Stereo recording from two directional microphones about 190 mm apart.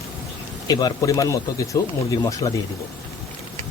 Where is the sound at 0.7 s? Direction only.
20° left (ahead or behind).